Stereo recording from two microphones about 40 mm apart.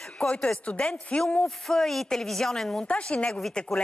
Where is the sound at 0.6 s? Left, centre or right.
Left.